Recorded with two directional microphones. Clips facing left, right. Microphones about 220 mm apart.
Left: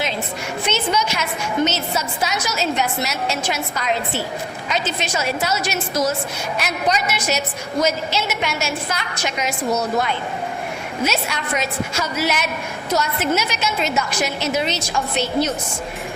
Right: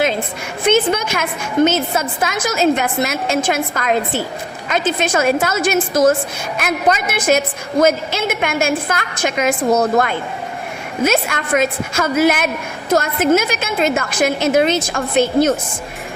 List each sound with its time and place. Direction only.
0.6 s a woman's voice: 50° right (ahead or behind)